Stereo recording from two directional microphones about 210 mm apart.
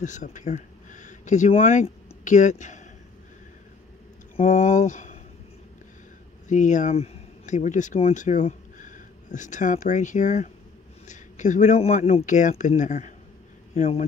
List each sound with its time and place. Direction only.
0.0 s speech: 35° left (ahead or behind)
4.4 s speech: 35° left (ahead or behind)
6.5 s speech: 35° left (ahead or behind)